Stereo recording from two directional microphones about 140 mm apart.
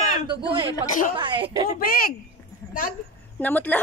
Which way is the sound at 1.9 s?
90° left.